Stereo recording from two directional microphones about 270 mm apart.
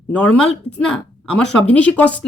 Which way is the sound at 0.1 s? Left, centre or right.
Centre.